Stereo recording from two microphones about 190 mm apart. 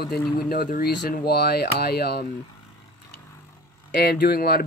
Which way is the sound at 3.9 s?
55° left (ahead or behind).